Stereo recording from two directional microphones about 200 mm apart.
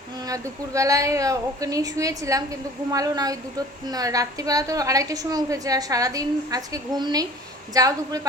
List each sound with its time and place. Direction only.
0.3 s a woman's voice: 15° right (ahead or behind)